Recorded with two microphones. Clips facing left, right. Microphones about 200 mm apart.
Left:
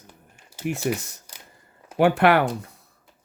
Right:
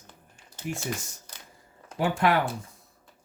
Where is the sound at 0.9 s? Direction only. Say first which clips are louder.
Left 8 dB; 70° left (ahead or behind).